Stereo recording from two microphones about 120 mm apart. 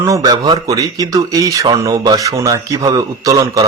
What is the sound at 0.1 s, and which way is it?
Speech, 35° right (ahead or behind).